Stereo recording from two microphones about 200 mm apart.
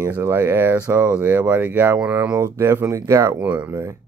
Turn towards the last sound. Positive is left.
turn(degrees=-15)  # may be behind; listen again after turning